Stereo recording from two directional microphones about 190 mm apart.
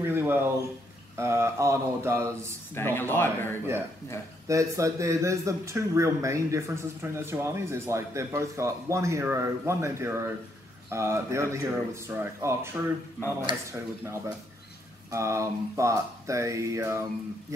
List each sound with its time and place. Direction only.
0.0 s a sound: 10° right (ahead or behind)
1.1 s speech: 15° right (ahead or behind)
2.7 s speech: 10° left (ahead or behind)
4.5 s speech: 15° right (ahead or behind)